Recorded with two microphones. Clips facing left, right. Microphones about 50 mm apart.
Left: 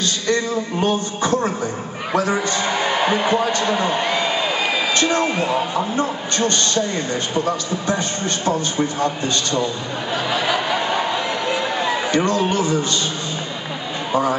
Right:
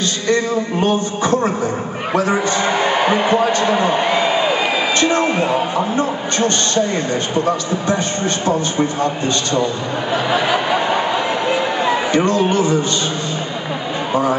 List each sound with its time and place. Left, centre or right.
0.0 s a man's voice: right
2.6 s a man's voice: centre
3.6 s a sound: centre
5.2 s speech: centre
5.9 s a man's voice: right
10.1 s a sound: centre
12.3 s a man's voice: right